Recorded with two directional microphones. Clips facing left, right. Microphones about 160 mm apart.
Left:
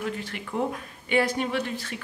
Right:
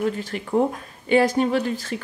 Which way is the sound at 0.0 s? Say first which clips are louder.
Right 7 dB; 35° right (ahead or behind).